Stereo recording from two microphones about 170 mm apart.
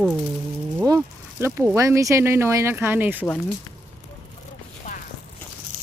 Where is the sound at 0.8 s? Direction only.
15° right (ahead or behind).